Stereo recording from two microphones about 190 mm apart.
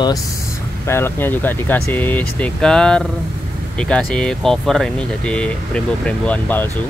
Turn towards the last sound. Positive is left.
turn(degrees=10)  # may be behind; listen again after turning